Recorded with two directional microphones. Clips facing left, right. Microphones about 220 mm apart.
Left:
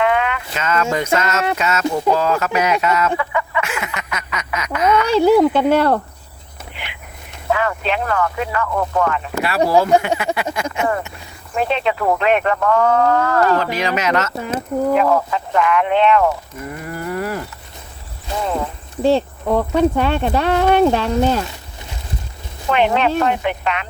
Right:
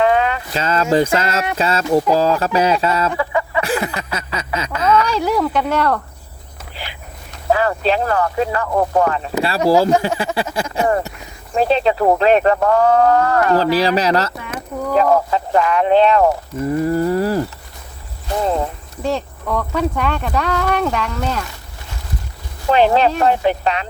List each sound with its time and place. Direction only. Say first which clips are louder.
0.0 s speech: right 2 dB; 35° right (ahead or behind)
3.2 s a sound: right 2 dB; 35° right (ahead or behind)
5.0 s speech: left 6 dB; 30° left (ahead or behind)
6.7 s a sound: right 3 dB; 35° right (ahead or behind)
7.5 s speech: right 3 dB; 35° right (ahead or behind)
14.3 s speech: left 6 dB; 25° left (ahead or behind)
14.9 s speech: right 6 dB; 35° right (ahead or behind)
19.0 s speech: left 6 dB; 30° left (ahead or behind)
22.7 s speech: right 2 dB; 35° right (ahead or behind)